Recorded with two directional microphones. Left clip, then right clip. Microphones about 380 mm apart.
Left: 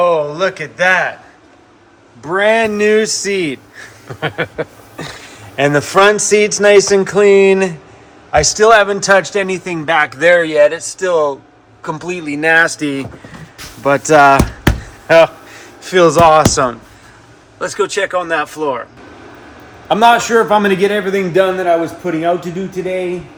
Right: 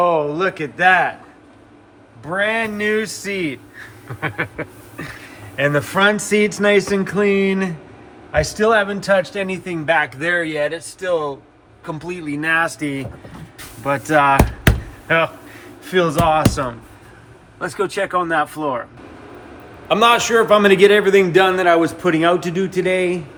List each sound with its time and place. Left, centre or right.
0.0 s a man's voice: centre
2.2 s a man's voice: centre
12.8 s a man's voice: centre
19.9 s a man's voice: centre